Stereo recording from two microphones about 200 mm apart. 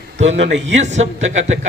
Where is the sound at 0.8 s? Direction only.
35° right (ahead or behind).